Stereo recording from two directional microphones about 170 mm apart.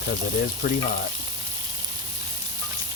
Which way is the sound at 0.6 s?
55° left (ahead or behind).